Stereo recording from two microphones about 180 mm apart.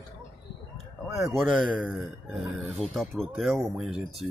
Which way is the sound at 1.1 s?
Centre (ahead or behind).